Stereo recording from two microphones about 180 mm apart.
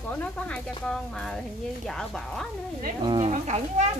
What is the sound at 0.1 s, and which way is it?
Speech, 10° left (ahead or behind).